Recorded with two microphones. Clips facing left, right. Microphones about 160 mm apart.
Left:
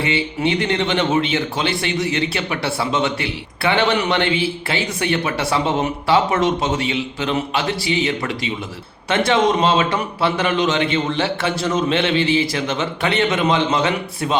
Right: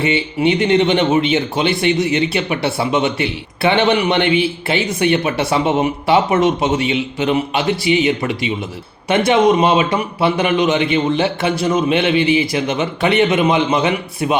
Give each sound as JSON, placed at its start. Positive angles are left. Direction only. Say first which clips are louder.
{"t": 0.3, "sound": "a man's voice", "louder": "right 8 dB", "side_deg": -20}